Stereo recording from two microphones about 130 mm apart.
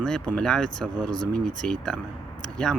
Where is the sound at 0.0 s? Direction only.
5° left (ahead or behind).